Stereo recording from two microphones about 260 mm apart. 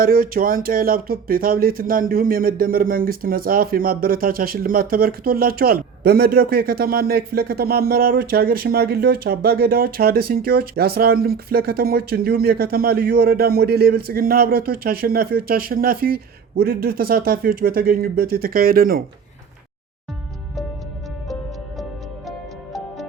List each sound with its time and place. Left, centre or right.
0.0 s speech: right